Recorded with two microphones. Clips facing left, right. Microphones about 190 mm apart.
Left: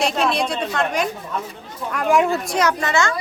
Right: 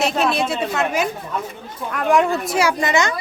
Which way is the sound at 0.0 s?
5° right (ahead or behind).